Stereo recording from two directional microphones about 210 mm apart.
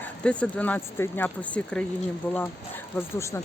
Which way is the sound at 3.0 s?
10° left (ahead or behind).